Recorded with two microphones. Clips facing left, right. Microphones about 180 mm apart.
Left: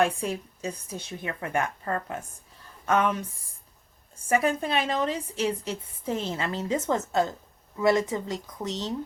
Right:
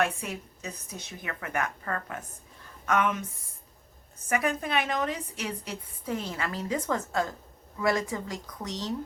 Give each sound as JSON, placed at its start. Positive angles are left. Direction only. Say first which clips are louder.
{"t": 0.0, "sound": "a woman's voice", "louder": "left 4 dB", "side_deg": 30}
{"t": 4.3, "sound": "a woman's voice", "louder": "left 4 dB", "side_deg": 30}